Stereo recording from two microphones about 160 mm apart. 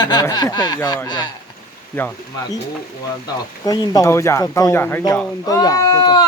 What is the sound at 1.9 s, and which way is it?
Speech, 10° left (ahead or behind).